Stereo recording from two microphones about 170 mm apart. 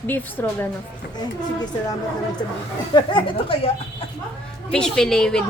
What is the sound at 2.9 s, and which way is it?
Speech, 30° left (ahead or behind).